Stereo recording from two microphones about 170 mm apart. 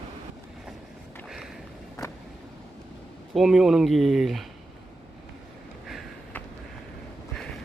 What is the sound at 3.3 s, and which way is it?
Speech, centre (ahead or behind).